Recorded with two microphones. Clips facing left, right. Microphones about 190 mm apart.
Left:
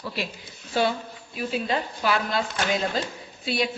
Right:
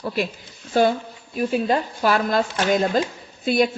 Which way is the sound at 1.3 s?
45° right (ahead or behind).